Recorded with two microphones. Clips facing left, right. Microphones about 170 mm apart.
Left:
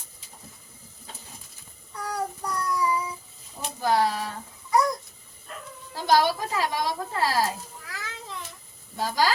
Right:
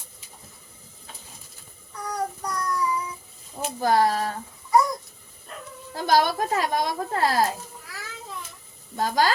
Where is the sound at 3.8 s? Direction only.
50° right (ahead or behind).